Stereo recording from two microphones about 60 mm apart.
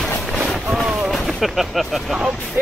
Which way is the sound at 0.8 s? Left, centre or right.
Centre.